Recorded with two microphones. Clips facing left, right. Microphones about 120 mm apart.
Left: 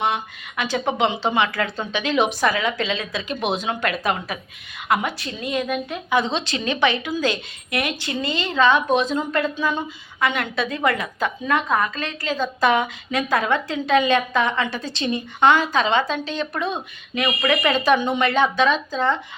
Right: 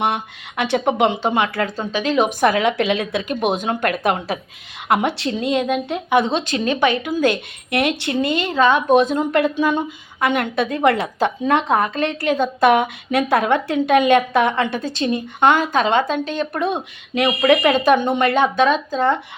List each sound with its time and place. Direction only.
0.0 s a woman's voice: 65° right (ahead or behind)
0.9 s a woman's voice: 50° right (ahead or behind)
2.4 s a woman's voice: 60° right (ahead or behind)
4.0 s a woman's voice: 65° right (ahead or behind)
5.0 s a woman's voice: 75° right (ahead or behind); by 19.2 s 50° right (ahead or behind)